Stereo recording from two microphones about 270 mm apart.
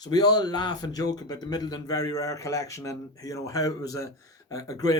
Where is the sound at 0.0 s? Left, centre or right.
Centre.